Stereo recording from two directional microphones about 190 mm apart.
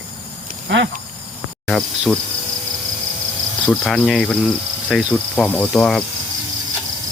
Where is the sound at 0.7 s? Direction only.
70° right (ahead or behind).